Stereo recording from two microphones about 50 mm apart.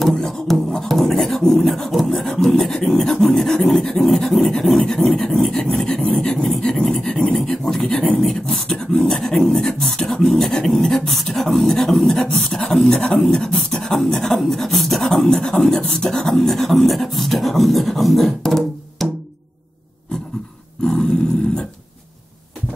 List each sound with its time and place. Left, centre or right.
0.2 s beatboxing: centre
6.3 s a sound: centre
7.4 s speech: centre
8.2 s speech: centre
9.8 s beatboxing: centre
13.7 s a sound: centre
20.8 s dog: centre